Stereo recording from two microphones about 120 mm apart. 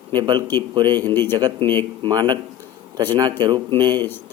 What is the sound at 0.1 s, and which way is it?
Speech, 40° right (ahead or behind).